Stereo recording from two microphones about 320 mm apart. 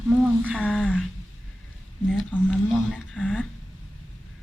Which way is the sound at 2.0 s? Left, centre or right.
Centre.